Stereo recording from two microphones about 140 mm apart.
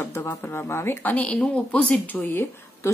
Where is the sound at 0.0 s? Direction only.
15° left (ahead or behind).